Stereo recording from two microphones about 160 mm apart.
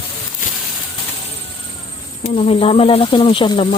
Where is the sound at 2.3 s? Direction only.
35° left (ahead or behind).